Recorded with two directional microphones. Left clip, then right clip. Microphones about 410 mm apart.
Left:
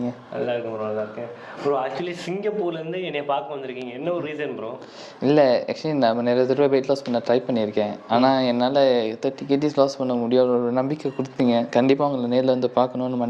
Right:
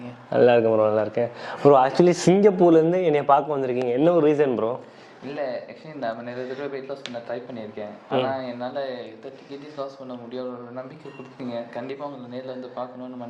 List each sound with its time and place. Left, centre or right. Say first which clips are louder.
0.3 s speech: right 10 dB; right
1.7 s a man's voice: right 9 dB; right
5.2 s speech: left 12 dB; left
11.3 s speech: left 12 dB; left